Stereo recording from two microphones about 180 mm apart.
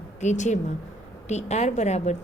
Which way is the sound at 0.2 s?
40° left (ahead or behind).